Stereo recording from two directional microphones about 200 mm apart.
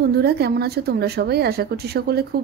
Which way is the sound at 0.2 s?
55° right (ahead or behind).